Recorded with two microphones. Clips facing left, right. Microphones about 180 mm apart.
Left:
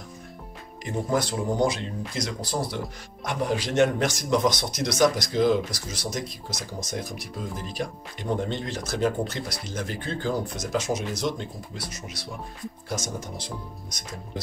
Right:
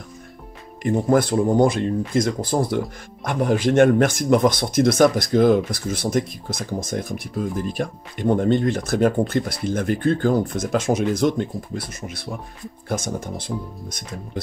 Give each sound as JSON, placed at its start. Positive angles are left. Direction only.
{"t": 0.8, "sound": "speech", "side_deg": -55}